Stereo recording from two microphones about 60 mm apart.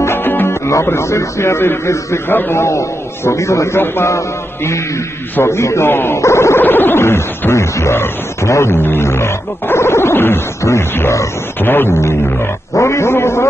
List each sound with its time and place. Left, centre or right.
0.0 s music: left
0.5 s music: left
0.8 s a man's voice: left
3.8 s a man's voice: left
5.4 s a man's voice: left
6.6 s a sound: left
7.0 s a man's voice: left
11.0 s a man's voice: left
11.6 s a man's voice: left
12.7 s a man's voice: left